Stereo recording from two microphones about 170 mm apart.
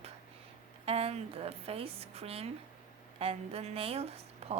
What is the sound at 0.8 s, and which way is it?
Speech, 35° right (ahead or behind).